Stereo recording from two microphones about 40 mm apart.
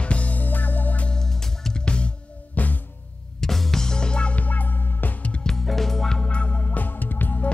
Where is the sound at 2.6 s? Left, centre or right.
Left.